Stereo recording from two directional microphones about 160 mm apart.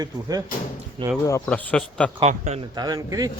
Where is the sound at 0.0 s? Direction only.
20° right (ahead or behind).